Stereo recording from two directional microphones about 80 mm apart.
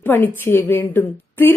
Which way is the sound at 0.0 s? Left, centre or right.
Left.